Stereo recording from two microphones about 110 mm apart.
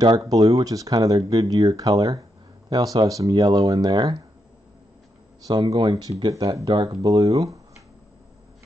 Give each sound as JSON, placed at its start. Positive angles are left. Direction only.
{"t": 0.0, "sound": "speech", "side_deg": -35}
{"t": 5.5, "sound": "speech", "side_deg": -40}